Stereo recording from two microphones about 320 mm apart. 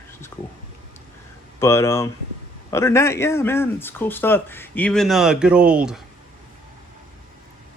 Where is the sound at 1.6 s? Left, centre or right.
Centre.